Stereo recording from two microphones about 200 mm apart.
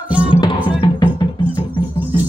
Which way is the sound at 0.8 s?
20° left (ahead or behind).